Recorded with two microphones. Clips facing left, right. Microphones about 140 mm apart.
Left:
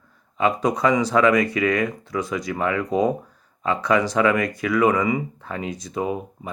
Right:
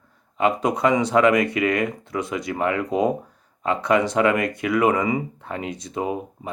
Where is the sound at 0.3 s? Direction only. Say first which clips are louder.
Even; 25° right (ahead or behind).